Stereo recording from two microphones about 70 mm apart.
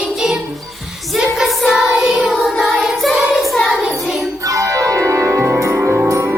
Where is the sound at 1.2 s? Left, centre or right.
Centre.